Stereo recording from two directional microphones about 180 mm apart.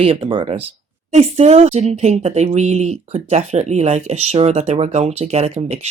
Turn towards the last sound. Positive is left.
turn(degrees=-40)  # may be behind; listen again after turning